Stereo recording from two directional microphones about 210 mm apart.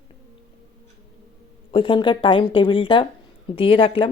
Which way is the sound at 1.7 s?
25° left (ahead or behind).